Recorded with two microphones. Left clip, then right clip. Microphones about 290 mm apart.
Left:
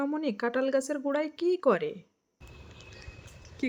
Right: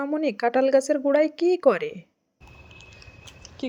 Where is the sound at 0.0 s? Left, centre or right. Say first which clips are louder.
Right 6 dB; centre.